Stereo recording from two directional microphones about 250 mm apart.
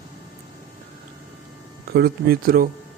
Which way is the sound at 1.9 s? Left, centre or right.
Right.